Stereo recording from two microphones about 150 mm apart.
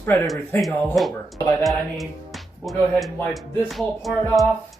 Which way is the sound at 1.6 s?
Centre (ahead or behind).